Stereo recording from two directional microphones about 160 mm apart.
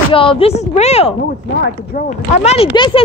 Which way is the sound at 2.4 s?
40° left (ahead or behind).